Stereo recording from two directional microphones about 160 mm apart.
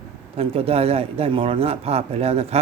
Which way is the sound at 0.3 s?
40° right (ahead or behind).